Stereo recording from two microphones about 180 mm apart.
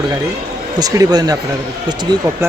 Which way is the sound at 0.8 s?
20° right (ahead or behind).